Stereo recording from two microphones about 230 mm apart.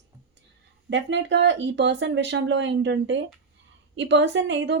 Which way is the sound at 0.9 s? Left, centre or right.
Right.